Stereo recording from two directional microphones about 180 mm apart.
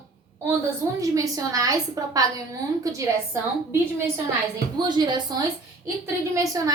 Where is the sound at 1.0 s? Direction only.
20° right (ahead or behind).